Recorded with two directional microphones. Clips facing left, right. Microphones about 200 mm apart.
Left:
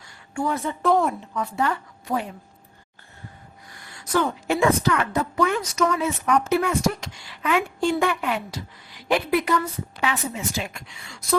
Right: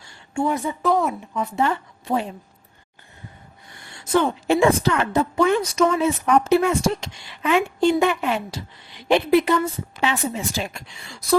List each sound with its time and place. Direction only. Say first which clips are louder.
0.0 s a sound: right 3 dB; 25° right (ahead or behind)
0.8 s a woman's voice: left 2 dB; centre (ahead or behind)
1.2 s a woman's voice: right 3 dB; 20° right (ahead or behind)
3.7 s a woman's voice: right 4 dB; 25° right (ahead or behind)